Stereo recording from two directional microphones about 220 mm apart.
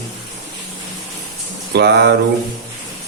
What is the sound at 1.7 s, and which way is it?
Speech, 50° right (ahead or behind).